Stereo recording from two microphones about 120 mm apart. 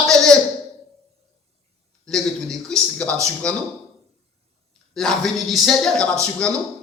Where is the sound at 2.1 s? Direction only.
5° left (ahead or behind).